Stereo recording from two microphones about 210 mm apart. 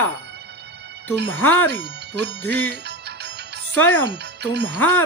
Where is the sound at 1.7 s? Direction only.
55° right (ahead or behind).